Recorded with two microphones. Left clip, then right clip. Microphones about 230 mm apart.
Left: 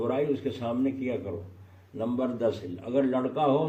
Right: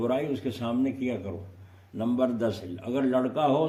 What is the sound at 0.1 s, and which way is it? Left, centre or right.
A man's voice, right.